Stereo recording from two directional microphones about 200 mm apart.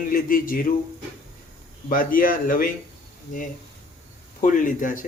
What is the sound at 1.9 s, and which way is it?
Speech, 45° left (ahead or behind).